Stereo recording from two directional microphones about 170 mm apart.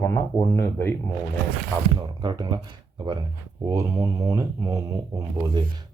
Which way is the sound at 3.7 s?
20° right (ahead or behind).